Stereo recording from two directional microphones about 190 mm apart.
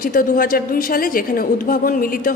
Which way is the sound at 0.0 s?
50° left (ahead or behind).